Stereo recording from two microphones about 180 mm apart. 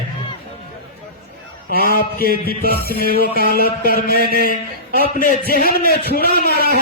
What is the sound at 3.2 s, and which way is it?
Speech, 60° right (ahead or behind).